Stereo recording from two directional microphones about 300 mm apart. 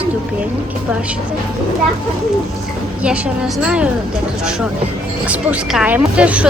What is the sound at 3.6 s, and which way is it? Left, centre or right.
Speech, centre.